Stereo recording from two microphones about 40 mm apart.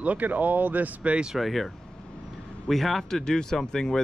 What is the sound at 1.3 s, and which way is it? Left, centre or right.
Speech, centre.